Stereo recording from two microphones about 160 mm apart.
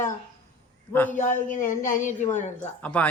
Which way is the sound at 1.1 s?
50° left (ahead or behind).